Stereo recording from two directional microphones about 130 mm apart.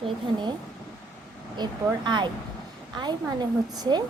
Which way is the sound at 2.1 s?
35° right (ahead or behind).